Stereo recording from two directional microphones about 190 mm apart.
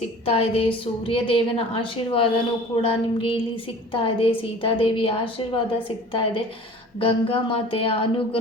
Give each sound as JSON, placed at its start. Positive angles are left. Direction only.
{"t": 0.3, "sound": "a woman's voice", "side_deg": 30}